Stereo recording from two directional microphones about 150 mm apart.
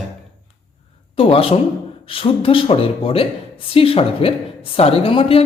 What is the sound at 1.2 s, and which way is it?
Speech, 40° left (ahead or behind).